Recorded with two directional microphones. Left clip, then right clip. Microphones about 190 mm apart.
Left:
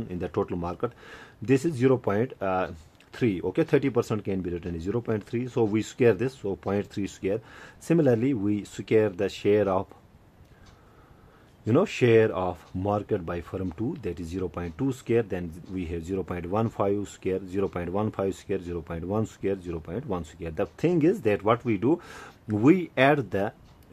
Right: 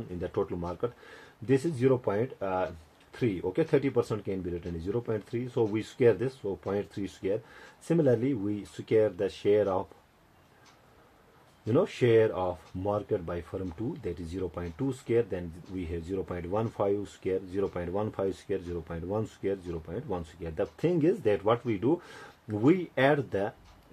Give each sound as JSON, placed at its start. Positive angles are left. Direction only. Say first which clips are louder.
{"t": 0.2, "sound": "speech", "louder": "left 3 dB", "side_deg": 45}
{"t": 11.6, "sound": "speech", "louder": "left 3 dB", "side_deg": 45}